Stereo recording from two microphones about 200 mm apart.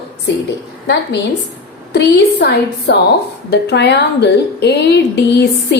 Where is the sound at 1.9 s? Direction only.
55° left (ahead or behind).